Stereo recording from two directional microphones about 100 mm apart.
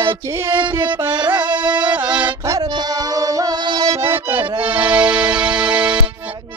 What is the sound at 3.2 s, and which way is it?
Music, 35° right (ahead or behind).